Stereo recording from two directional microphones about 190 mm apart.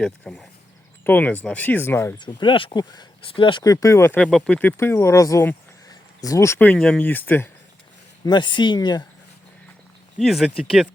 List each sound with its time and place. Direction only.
0.0 s speech: 5° left (ahead or behind)
2.1 s speech: 25° left (ahead or behind)
8.2 s speech: 25° left (ahead or behind)
10.2 s speech: centre (ahead or behind)